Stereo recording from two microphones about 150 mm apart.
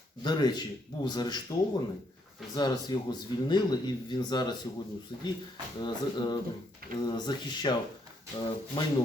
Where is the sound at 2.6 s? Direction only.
25° left (ahead or behind).